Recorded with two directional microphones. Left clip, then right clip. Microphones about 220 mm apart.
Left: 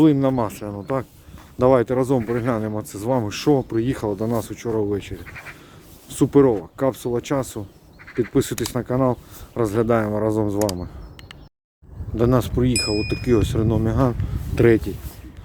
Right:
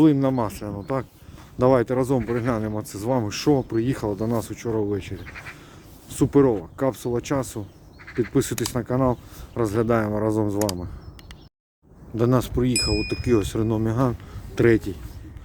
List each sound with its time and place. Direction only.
0.0 s speech: 5° left (ahead or behind)
5.2 s speech: 40° right (ahead or behind)
6.1 s speech: 5° left (ahead or behind)
8.0 s a sound: 30° right (ahead or behind)
8.3 s speech: centre (ahead or behind)
12.1 s speech: centre (ahead or behind)